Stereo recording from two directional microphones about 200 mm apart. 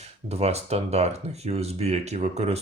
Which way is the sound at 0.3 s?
30° right (ahead or behind).